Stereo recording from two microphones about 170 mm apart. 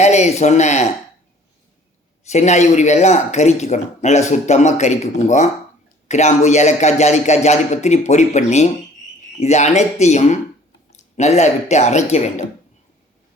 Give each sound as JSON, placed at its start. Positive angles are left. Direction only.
{"t": 0.0, "sound": "speech", "side_deg": 40}
{"t": 2.2, "sound": "speech", "side_deg": 40}